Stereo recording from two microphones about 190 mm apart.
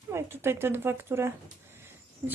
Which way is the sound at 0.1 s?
15° right (ahead or behind).